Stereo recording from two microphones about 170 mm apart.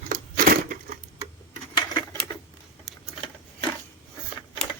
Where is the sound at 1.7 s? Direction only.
25° left (ahead or behind).